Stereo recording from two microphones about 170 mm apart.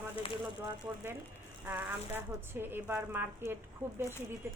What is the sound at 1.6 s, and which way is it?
Speech, 10° right (ahead or behind).